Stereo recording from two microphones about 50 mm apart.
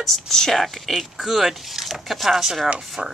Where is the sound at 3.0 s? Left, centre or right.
Centre.